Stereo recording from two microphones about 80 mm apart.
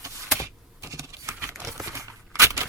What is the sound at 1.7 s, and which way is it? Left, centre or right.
Crumpling, right.